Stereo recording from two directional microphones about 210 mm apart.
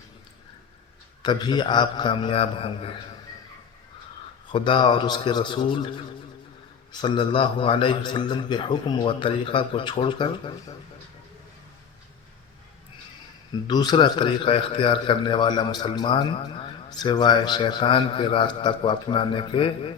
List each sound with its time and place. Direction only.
1.2 s a man's voice: 20° left (ahead or behind)
4.5 s a man's voice: 25° left (ahead or behind)
6.9 s a man's voice: 25° left (ahead or behind)
13.7 s a man's voice: 20° left (ahead or behind)